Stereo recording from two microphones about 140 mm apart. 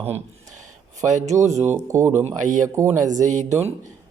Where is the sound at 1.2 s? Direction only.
55° right (ahead or behind).